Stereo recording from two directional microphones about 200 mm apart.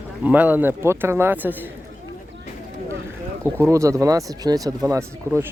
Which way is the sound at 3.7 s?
15° right (ahead or behind).